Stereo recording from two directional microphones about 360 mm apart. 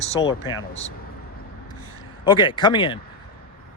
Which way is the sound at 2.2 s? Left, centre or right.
Centre.